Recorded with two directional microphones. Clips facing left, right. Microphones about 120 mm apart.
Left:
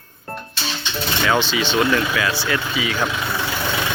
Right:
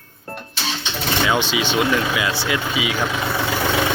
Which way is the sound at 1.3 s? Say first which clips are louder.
Left 3 dB; 15° right (ahead or behind).